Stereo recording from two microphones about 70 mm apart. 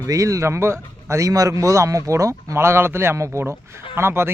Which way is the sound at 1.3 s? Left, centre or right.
Right.